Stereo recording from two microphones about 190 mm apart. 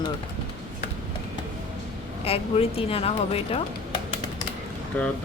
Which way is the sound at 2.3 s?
30° left (ahead or behind).